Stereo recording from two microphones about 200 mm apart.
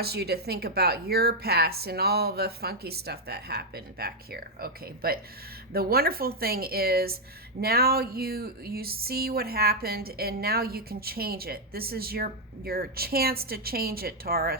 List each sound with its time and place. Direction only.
0.0 s speech: 50° right (ahead or behind)